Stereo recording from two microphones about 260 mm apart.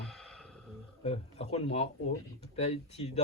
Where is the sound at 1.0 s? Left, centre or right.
Left.